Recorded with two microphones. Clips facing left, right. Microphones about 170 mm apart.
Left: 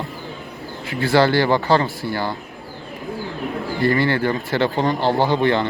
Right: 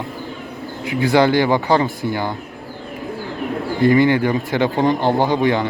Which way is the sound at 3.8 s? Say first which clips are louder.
Right 5 dB; 15° right (ahead or behind).